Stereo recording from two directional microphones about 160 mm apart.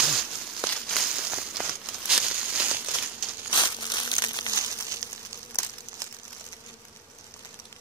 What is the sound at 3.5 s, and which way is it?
Crumpling, 25° left (ahead or behind).